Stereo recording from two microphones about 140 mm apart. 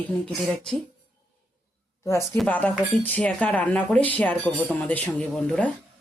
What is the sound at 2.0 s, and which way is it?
Speech, 20° left (ahead or behind).